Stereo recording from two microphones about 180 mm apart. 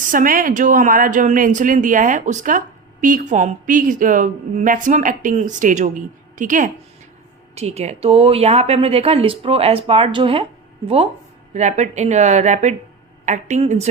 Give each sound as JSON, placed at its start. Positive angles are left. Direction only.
{"t": 0.0, "sound": "speech", "side_deg": -50}
{"t": 7.5, "sound": "a woman's voice", "side_deg": -35}